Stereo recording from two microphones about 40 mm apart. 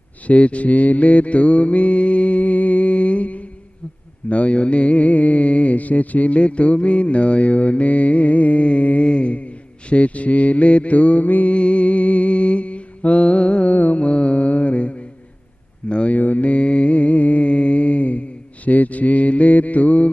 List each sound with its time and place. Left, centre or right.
0.3 s mantra: left
11.5 s mantra: left
13.7 s music: left
13.9 s mantra: left
16.1 s mantra: left